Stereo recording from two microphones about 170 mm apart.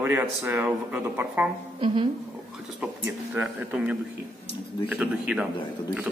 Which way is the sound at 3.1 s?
10° right (ahead or behind).